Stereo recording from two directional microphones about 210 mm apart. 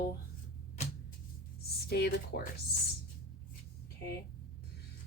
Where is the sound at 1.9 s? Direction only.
50° left (ahead or behind).